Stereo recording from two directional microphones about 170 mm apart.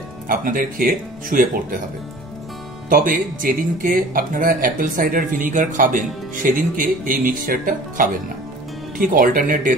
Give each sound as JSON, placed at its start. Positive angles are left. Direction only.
{"t": 0.3, "sound": "speech", "side_deg": -55}
{"t": 2.9, "sound": "speech", "side_deg": -55}